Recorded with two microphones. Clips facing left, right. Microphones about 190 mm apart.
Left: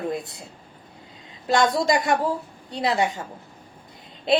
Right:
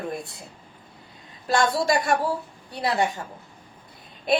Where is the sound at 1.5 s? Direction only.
20° left (ahead or behind).